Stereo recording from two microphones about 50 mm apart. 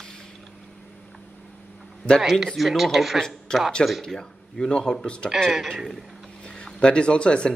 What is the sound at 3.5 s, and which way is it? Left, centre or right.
Speech, centre.